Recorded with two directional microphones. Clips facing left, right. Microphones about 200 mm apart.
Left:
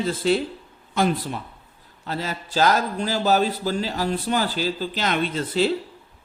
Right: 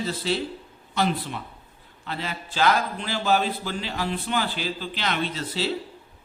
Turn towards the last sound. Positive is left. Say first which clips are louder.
# left 6 dB
turn(degrees=50)  # may be behind; listen again after turning